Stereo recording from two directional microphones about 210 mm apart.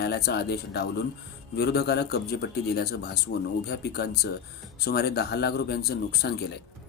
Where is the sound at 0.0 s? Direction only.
50° left (ahead or behind).